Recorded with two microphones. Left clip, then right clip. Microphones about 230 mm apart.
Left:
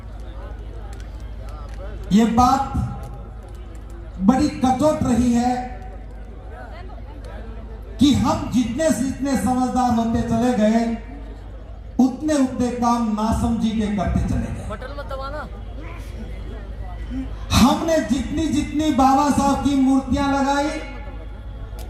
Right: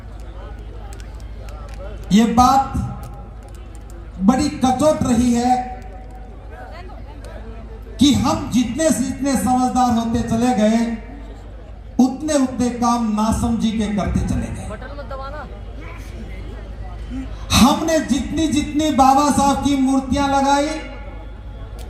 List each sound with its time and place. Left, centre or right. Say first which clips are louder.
2.0 s speech: right 2 dB; right
4.3 s speech: right 1 dB; right
7.9 s speech: right 2 dB; right
11.9 s speech: right 2 dB; right
14.7 s music: even; left
17.5 s speech: right 2 dB; right